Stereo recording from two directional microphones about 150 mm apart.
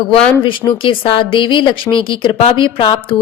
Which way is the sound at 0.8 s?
35° left (ahead or behind).